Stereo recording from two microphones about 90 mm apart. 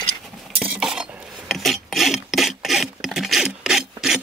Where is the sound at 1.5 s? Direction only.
Centre (ahead or behind).